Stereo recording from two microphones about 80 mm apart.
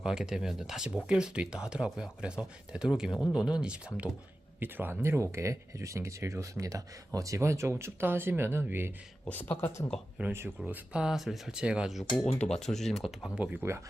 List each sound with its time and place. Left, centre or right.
0.0 s speech: centre
4.6 s speech: right
9.3 s speech: left
10.2 s speech: centre
11.0 s speech: centre
13.3 s speech: centre